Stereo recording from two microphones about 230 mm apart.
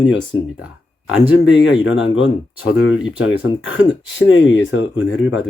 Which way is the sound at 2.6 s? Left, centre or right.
Left.